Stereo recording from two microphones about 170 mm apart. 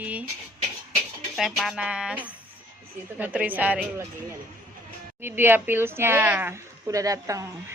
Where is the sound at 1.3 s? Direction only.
Centre (ahead or behind).